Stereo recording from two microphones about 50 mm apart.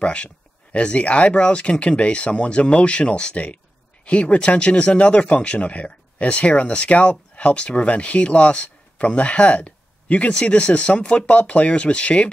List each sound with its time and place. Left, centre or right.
0.0 s speech: left